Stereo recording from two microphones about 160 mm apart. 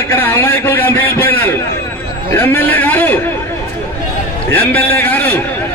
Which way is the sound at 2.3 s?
15° left (ahead or behind).